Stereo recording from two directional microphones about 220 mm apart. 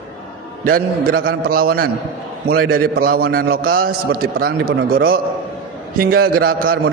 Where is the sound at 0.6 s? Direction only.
40° right (ahead or behind).